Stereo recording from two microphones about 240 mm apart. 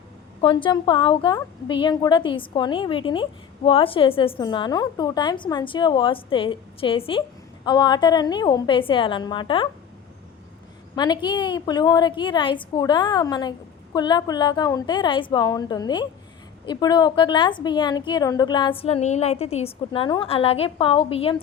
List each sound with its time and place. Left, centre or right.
0.4 s a woman's voice: centre
10.9 s a woman's voice: centre